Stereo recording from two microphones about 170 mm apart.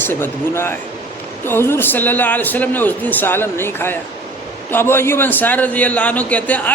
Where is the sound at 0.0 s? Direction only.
10° left (ahead or behind).